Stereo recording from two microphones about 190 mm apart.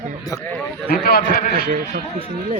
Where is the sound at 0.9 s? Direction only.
55° left (ahead or behind).